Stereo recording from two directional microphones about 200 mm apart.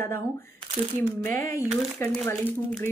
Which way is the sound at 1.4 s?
15° left (ahead or behind).